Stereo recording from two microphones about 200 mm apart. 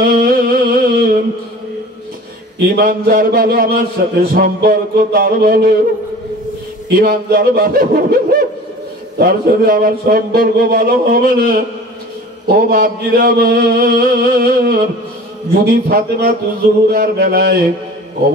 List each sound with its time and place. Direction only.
0.0 s a sound: 45° right (ahead or behind)
2.7 s a man's voice: 45° right (ahead or behind)
7.0 s a man's voice: 45° right (ahead or behind)